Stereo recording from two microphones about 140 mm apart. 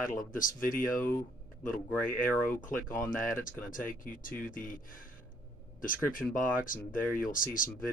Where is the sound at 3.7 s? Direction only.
75° left (ahead or behind).